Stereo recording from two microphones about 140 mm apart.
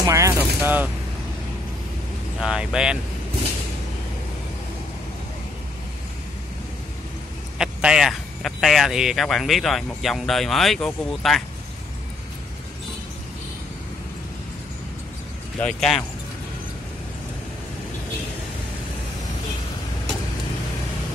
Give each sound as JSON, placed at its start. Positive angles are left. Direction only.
{"t": 0.0, "sound": "a sound", "side_deg": -20}
{"t": 0.6, "sound": "speech", "side_deg": -10}
{"t": 2.4, "sound": "speech", "side_deg": -5}
{"t": 7.5, "sound": "speech", "side_deg": -5}
{"t": 15.6, "sound": "speech", "side_deg": 5}